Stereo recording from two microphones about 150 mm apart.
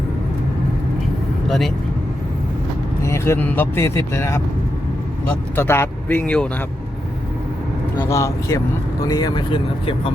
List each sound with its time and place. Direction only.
1.5 s speech: centre (ahead or behind)
3.0 s speech: 20° left (ahead or behind)
5.5 s speech: 15° left (ahead or behind)
7.9 s speech: 20° left (ahead or behind)